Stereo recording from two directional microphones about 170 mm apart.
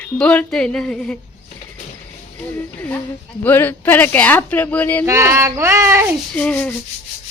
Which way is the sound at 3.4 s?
10° left (ahead or behind).